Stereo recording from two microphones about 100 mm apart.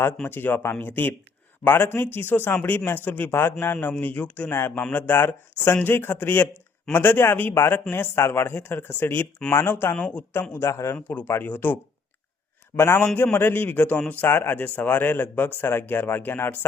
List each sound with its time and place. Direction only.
0.2 s a man's voice: 20° left (ahead or behind)
10.5 s a man's voice: 30° left (ahead or behind)
10.9 s a man's voice: 15° left (ahead or behind)